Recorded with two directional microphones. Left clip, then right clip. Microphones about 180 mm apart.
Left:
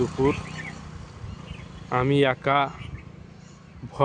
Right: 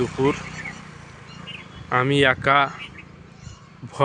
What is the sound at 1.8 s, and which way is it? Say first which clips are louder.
Speech: right 3 dB; 5° left (ahead or behind).